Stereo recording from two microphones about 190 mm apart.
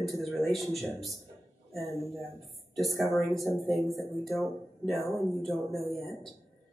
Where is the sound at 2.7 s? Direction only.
Centre (ahead or behind).